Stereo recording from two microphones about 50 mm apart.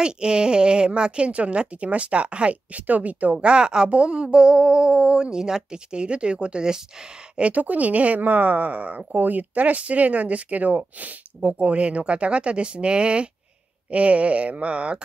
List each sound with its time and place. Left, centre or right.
0.0 s speech: centre
7.3 s speech: right